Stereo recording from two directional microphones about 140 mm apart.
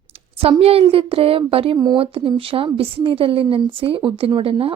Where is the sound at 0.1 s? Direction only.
45° right (ahead or behind).